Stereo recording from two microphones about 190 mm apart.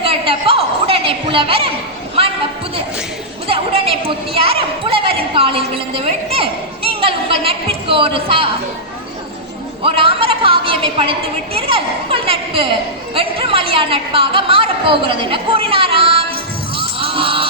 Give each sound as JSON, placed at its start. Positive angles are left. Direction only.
{"t": 0.0, "sound": "a sound", "side_deg": -30}
{"t": 3.4, "sound": "chatter", "side_deg": -30}
{"t": 4.4, "sound": "a woman's voice", "side_deg": -30}
{"t": 9.8, "sound": "a woman's voice", "side_deg": -30}
{"t": 16.7, "sound": "music", "side_deg": -30}